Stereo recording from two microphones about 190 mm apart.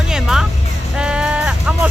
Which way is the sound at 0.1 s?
5° right (ahead or behind).